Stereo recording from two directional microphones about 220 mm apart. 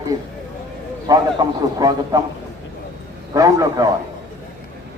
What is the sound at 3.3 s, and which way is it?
Speech, 15° right (ahead or behind).